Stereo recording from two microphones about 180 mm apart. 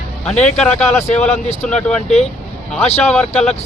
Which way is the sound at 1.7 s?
5° left (ahead or behind).